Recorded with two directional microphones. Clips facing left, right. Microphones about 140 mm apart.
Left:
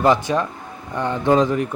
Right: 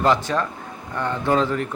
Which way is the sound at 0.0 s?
15° left (ahead or behind).